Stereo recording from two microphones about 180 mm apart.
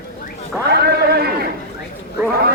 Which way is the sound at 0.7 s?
60° right (ahead or behind).